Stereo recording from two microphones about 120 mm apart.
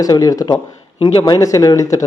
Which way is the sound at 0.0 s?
30° left (ahead or behind).